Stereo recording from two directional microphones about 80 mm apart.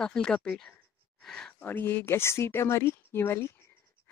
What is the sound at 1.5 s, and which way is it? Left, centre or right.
Speech, left.